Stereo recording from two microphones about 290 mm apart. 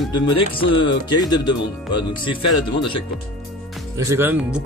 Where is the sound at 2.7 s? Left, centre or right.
Centre.